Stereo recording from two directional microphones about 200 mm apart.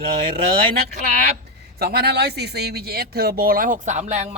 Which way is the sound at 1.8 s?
55° right (ahead or behind).